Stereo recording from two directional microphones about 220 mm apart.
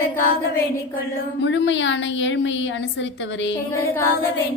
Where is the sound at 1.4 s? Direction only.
55° left (ahead or behind).